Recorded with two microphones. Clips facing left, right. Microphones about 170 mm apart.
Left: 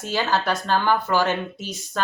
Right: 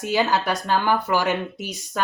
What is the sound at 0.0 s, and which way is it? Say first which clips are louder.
Speech: right 2 dB; 15° right (ahead or behind).